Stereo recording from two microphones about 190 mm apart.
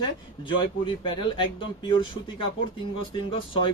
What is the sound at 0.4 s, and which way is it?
A man's voice, 25° left (ahead or behind).